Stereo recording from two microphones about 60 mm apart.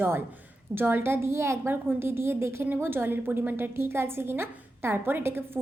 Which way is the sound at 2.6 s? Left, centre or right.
Right.